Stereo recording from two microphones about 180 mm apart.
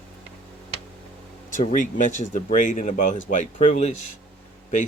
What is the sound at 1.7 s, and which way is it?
Speech, 45° left (ahead or behind).